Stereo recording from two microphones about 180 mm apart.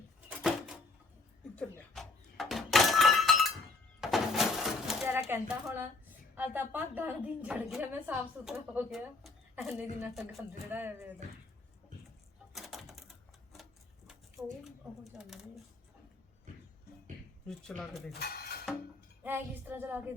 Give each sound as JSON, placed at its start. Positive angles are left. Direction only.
{"t": 1.5, "sound": "doorbell", "side_deg": 5}
{"t": 4.0, "sound": "a sound", "side_deg": 0}
{"t": 5.3, "sound": "a woman's voice", "side_deg": -10}
{"t": 12.5, "sound": "a sound", "side_deg": 0}
{"t": 15.1, "sound": "speech", "side_deg": 0}
{"t": 17.6, "sound": "speech", "side_deg": 5}
{"t": 18.2, "sound": "music", "side_deg": 55}
{"t": 19.2, "sound": "a woman's voice", "side_deg": -10}